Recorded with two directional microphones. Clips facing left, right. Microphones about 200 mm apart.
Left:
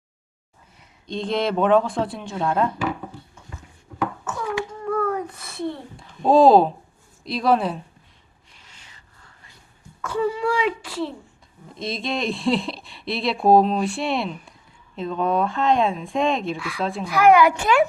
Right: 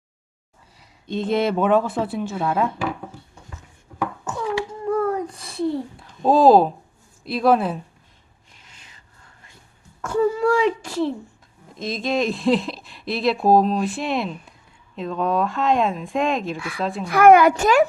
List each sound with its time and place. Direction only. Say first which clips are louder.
1.0 s speech: right 3 dB; 5° right (ahead or behind)
4.3 s a sound: right 2 dB; 30° right (ahead or behind)
6.0 s speech: left 2 dB; 5° right (ahead or behind)
10.1 s speech: right 4 dB; 45° right (ahead or behind)
11.9 s speech: right 3 dB; centre (ahead or behind)
17.1 s a child's voice: right 3 dB; 50° right (ahead or behind)